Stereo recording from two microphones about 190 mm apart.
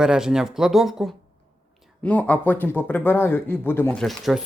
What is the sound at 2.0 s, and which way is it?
Speech, 10° left (ahead or behind).